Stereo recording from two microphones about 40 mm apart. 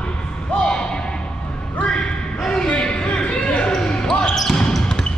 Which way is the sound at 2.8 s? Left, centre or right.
Left.